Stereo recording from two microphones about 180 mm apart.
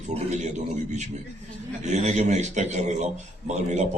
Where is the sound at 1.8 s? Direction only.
40° right (ahead or behind).